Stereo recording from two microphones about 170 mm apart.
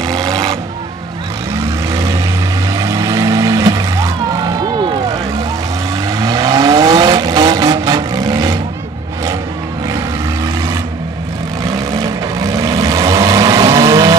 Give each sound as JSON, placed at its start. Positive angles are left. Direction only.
{"t": 0.0, "sound": "vehicle", "side_deg": -20}
{"t": 6.0, "sound": "vehicle", "side_deg": -20}
{"t": 11.7, "sound": "vehicle", "side_deg": -20}